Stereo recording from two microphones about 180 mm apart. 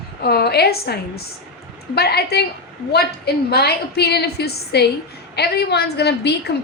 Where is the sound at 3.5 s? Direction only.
60° left (ahead or behind).